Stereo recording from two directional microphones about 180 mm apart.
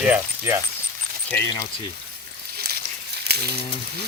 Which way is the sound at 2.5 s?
60° right (ahead or behind).